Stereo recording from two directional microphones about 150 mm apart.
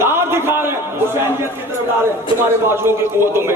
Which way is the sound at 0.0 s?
15° right (ahead or behind).